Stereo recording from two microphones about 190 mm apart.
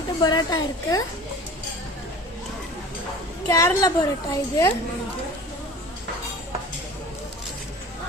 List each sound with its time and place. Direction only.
0.2 s a woman's voice: 20° left (ahead or behind)
3.5 s a woman's voice: 15° left (ahead or behind)